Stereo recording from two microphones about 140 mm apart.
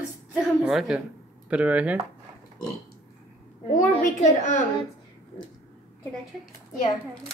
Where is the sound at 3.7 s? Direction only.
65° left (ahead or behind).